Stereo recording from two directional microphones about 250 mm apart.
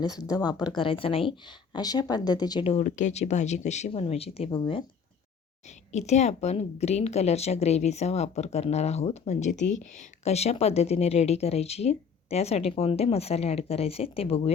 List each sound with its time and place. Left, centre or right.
0.0 s speech: centre
5.9 s speech: left